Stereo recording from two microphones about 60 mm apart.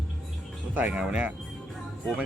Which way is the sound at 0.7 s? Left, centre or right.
Right.